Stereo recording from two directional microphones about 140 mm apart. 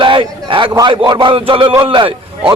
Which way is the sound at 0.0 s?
35° right (ahead or behind).